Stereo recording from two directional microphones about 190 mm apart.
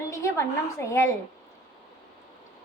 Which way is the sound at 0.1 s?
15° left (ahead or behind).